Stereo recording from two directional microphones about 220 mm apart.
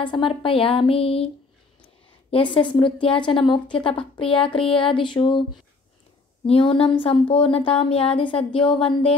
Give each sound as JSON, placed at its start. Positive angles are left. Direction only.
{"t": 0.0, "sound": "a woman's voice", "side_deg": 20}
{"t": 2.3, "sound": "a woman's voice", "side_deg": 20}
{"t": 6.4, "sound": "a woman's voice", "side_deg": 25}